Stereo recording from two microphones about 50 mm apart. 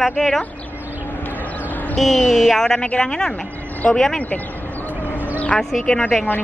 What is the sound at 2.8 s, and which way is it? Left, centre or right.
Speech, centre.